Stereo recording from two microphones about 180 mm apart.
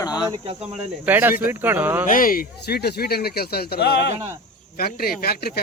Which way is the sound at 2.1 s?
50° left (ahead or behind).